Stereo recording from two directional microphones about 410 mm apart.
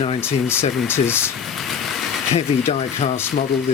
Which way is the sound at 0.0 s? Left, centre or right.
Centre.